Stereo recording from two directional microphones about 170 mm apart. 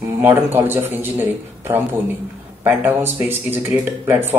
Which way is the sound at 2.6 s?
10° right (ahead or behind).